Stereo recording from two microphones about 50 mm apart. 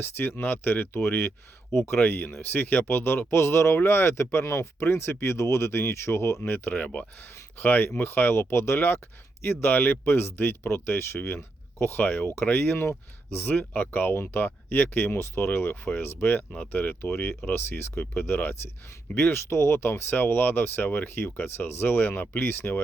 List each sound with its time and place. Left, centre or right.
0.0 s speech: left
6.4 s speech: left
11.9 s speech: left
12.7 s speech: left
15.1 s speech: left
15.4 s speech: left
19.5 s speech: left